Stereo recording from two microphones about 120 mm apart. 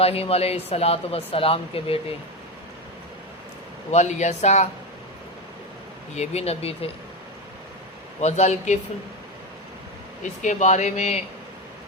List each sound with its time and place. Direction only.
0.0 s speech: 55° left (ahead or behind)
3.9 s speech: 70° left (ahead or behind)
6.1 s speech: 60° left (ahead or behind)
8.2 s speech: 70° left (ahead or behind)
10.4 s speech: 85° left